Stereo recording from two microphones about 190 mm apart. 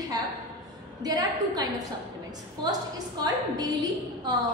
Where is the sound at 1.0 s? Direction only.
20° right (ahead or behind).